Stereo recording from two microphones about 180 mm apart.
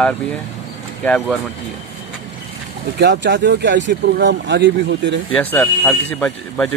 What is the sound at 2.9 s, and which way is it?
Speech, 70° right (ahead or behind).